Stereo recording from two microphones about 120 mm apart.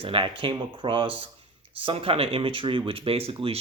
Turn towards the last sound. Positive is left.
turn(degrees=-55)  # may be behind; listen again after turning